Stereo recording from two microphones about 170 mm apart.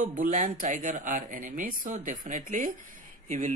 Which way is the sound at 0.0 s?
50° right (ahead or behind).